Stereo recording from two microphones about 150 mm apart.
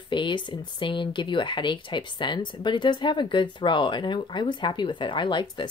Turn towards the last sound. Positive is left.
turn(degrees=30)  # may be behind; listen again after turning